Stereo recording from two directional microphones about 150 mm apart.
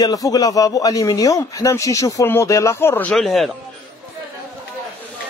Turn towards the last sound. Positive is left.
turn(degrees=0)  # may be behind; listen again after turning